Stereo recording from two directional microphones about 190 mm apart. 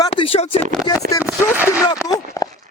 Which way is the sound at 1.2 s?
10° right (ahead or behind).